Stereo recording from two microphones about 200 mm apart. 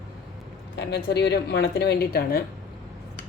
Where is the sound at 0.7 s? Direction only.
55° left (ahead or behind).